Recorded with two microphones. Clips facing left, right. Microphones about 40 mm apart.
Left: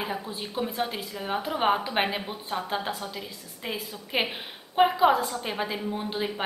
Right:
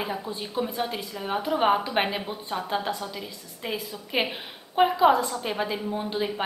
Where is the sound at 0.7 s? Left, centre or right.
Centre.